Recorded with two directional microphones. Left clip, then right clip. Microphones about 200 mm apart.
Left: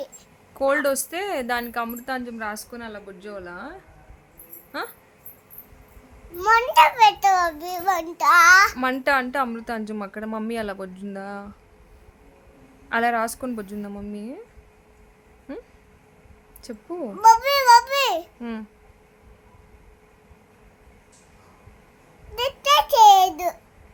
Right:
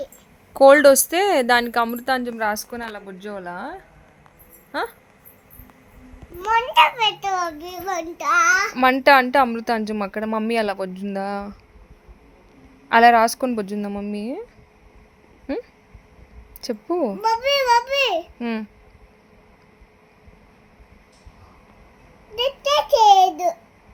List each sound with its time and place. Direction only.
0.5 s a woman's voice: 30° right (ahead or behind)
6.4 s a child's voice: 10° left (ahead or behind)
6.7 s a child's voice: centre (ahead or behind)
7.0 s a child's voice: 15° left (ahead or behind)
8.7 s a woman's voice: 20° right (ahead or behind)
12.9 s a woman's voice: 20° right (ahead or behind)
17.2 s a child's voice: 15° left (ahead or behind)
18.3 s a child's voice: 15° right (ahead or behind)
22.4 s a child's voice: 15° left (ahead or behind)